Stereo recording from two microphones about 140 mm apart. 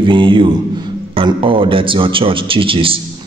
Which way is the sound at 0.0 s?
35° right (ahead or behind).